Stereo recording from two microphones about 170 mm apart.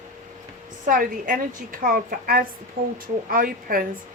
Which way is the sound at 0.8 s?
55° right (ahead or behind).